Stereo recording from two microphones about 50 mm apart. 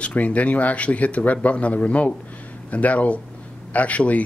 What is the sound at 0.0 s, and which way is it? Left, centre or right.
Speech, left.